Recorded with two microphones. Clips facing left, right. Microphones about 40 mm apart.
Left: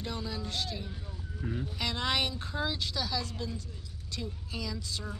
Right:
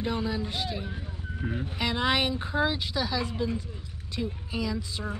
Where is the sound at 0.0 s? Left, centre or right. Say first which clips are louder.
Right 8 dB; right.